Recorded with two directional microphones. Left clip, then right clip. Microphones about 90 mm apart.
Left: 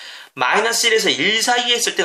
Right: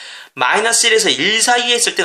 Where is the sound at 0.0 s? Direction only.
20° right (ahead or behind).